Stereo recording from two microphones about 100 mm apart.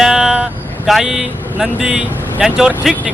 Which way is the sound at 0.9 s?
Centre (ahead or behind).